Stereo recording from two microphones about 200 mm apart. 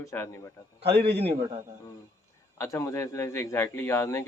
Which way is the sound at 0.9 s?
55° right (ahead or behind).